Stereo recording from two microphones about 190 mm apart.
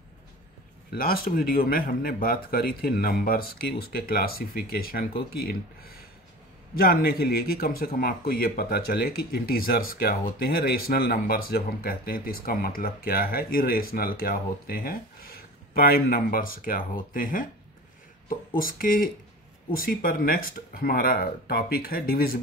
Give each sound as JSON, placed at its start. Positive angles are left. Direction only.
{"t": 0.8, "sound": "speech", "side_deg": 50}
{"t": 18.6, "sound": "speech", "side_deg": 50}